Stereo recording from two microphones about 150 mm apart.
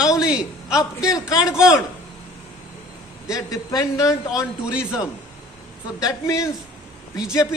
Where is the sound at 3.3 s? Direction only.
25° left (ahead or behind).